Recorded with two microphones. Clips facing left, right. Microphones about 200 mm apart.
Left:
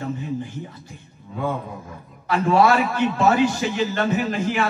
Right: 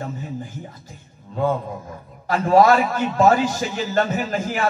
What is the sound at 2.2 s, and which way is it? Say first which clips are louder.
A man's voice: right 2 dB; 40° right (ahead or behind).